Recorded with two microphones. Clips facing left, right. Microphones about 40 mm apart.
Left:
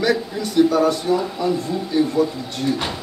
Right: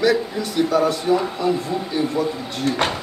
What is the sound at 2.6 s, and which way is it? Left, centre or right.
Speech, right.